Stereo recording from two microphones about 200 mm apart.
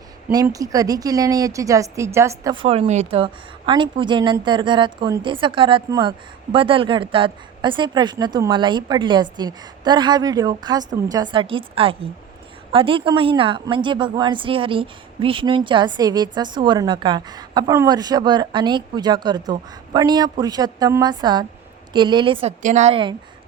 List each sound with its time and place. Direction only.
0.4 s a woman's voice: 15° right (ahead or behind)